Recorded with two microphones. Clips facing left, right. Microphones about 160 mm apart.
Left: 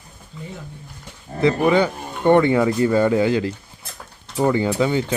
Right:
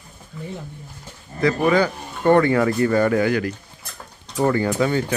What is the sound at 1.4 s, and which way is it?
Speech, 25° left (ahead or behind).